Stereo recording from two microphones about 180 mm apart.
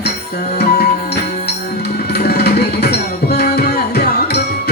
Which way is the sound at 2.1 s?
60° left (ahead or behind).